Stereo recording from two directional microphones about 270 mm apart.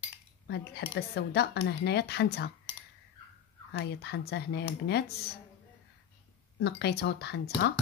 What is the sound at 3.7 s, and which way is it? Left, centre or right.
Speech, left.